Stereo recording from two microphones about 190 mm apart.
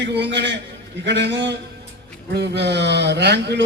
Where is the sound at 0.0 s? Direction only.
65° right (ahead or behind).